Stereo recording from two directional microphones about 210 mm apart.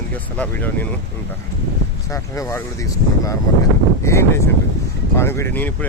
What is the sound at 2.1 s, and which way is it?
Speech, 15° left (ahead or behind).